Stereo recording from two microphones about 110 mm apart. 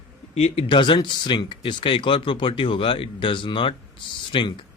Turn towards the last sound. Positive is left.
turn(degrees=50)  # may be behind; listen again after turning